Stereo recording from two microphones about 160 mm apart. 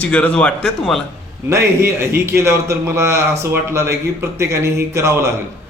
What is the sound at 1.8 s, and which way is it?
A man's voice, 15° right (ahead or behind).